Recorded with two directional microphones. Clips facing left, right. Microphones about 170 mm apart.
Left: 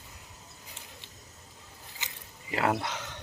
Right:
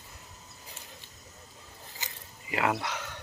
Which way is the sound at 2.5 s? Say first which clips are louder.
Left 1 dB; 35° left (ahead or behind).